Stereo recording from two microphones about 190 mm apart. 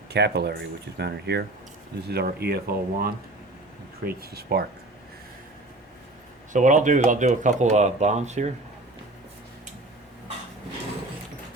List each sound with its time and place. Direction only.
0.1 s speech: 60° right (ahead or behind)
6.5 s speech: 40° right (ahead or behind)